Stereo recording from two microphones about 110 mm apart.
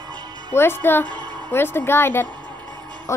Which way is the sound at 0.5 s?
20° left (ahead or behind).